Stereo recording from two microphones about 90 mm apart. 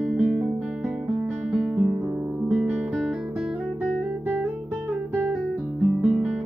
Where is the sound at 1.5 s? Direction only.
10° right (ahead or behind).